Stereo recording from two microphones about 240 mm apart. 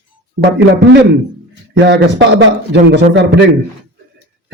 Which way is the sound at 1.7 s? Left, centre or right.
Right.